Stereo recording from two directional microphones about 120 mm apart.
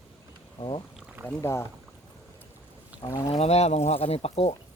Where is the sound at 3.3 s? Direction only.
60° left (ahead or behind).